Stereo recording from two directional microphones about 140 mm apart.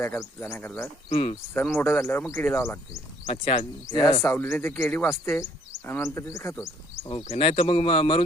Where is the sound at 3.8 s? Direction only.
30° left (ahead or behind).